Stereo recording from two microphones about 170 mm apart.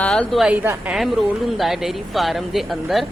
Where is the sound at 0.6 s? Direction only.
15° right (ahead or behind).